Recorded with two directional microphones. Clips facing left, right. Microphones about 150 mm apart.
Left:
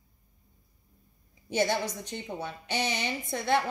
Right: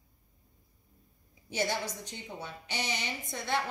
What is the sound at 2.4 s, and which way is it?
Speech, 55° left (ahead or behind).